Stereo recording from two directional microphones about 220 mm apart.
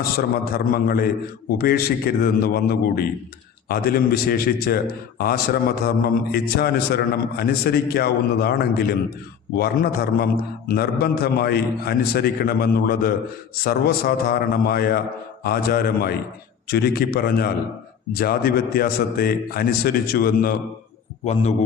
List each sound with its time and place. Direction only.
0.2 s a man's voice: 40° left (ahead or behind)